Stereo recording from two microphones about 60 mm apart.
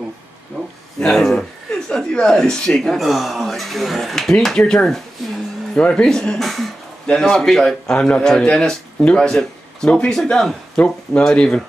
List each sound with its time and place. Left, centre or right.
0.9 s a man's voice: centre
3.0 s a man's voice: centre
6.4 s throat clearing: centre
7.1 s a man's voice: centre